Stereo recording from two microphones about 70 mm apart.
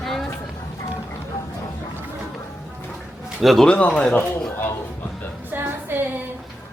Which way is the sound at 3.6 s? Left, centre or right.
Centre.